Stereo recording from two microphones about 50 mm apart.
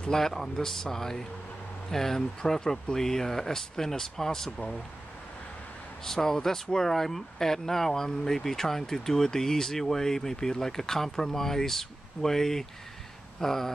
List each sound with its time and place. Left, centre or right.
0.0 s speech: centre
6.0 s speech: centre
13.4 s a sound: centre